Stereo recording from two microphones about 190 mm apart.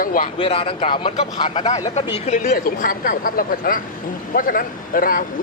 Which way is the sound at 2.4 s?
50° left (ahead or behind).